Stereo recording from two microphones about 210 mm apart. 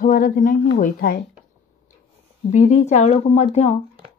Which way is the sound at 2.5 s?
35° left (ahead or behind).